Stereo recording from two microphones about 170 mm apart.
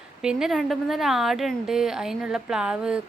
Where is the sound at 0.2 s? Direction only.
5° right (ahead or behind).